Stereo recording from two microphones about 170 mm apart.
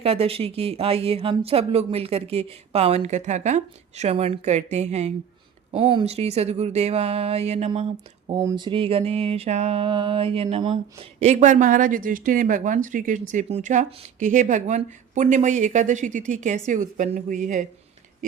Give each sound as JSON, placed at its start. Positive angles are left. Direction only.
{"t": 0.0, "sound": "speech", "side_deg": -35}